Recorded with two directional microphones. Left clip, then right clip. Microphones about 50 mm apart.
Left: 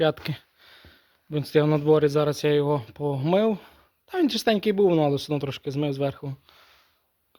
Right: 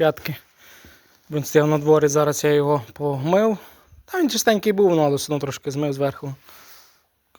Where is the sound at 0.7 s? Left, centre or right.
Centre.